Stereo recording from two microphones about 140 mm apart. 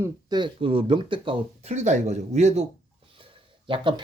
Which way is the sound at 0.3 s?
35° right (ahead or behind).